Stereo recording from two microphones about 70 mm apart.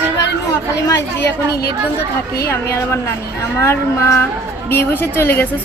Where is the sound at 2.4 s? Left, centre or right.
Left.